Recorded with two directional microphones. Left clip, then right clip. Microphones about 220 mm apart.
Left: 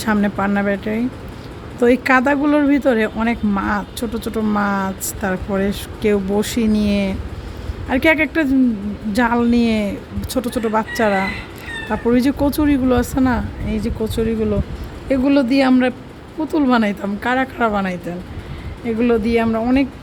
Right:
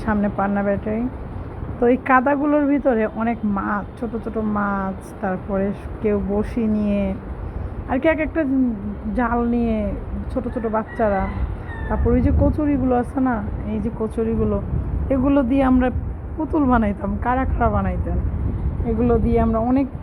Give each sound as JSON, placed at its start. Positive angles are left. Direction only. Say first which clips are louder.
{"t": 0.0, "sound": "speech", "louder": "left 3 dB", "side_deg": 35}